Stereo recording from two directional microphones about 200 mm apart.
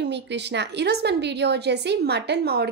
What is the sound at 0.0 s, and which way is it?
A woman's voice, 60° right (ahead or behind).